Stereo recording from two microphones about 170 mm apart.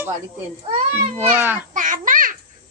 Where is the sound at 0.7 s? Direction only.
40° right (ahead or behind).